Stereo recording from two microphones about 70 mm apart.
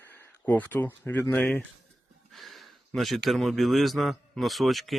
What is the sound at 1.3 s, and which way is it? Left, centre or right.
Speech, left.